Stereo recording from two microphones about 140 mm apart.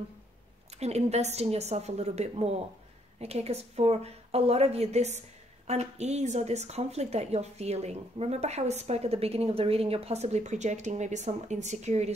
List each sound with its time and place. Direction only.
0.7 s a woman's voice: 50° right (ahead or behind)